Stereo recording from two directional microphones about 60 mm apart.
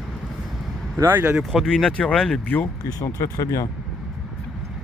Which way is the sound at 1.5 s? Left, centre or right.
Centre.